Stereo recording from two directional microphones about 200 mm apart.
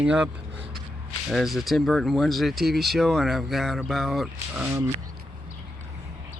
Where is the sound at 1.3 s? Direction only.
Centre (ahead or behind).